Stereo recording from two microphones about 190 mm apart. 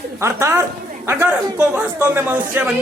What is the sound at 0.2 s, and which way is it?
A man's voice, 15° right (ahead or behind).